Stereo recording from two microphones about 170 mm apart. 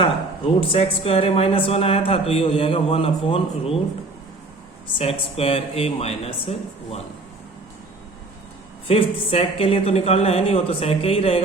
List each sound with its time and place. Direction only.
0.0 s speech: 30° left (ahead or behind)
4.9 s speech: 35° left (ahead or behind)
8.9 s speech: 35° left (ahead or behind)